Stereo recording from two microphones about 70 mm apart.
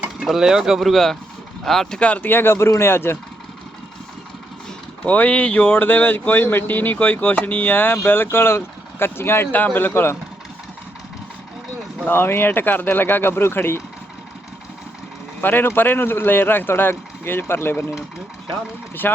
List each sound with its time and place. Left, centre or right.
0.2 s speech: centre
2.0 s speech: centre; by 3.2 s left
5.0 s speech: left
5.7 s speech: left
12.0 s speech: left
15.4 s speech: left
19.0 s speech: left